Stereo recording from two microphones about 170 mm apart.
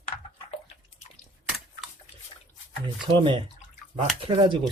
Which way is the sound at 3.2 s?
25° right (ahead or behind).